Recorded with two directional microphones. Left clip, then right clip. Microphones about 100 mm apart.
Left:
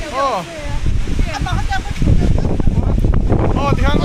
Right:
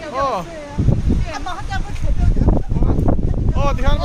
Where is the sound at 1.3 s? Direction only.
5° right (ahead or behind).